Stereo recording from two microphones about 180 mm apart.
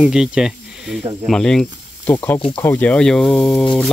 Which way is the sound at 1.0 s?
25° right (ahead or behind).